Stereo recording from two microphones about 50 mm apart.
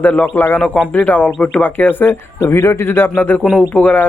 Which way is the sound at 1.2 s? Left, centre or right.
Left.